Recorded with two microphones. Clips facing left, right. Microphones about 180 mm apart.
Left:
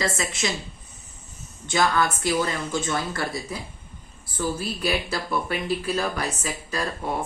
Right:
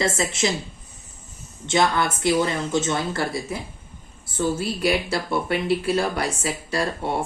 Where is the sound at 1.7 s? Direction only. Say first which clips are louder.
Right 1 dB; 25° right (ahead or behind).